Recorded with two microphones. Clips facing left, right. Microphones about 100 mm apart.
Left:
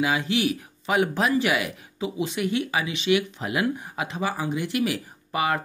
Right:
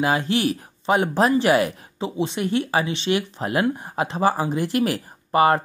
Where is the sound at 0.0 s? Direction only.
40° right (ahead or behind).